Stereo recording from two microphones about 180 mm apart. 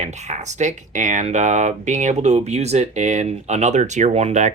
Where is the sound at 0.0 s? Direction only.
40° right (ahead or behind).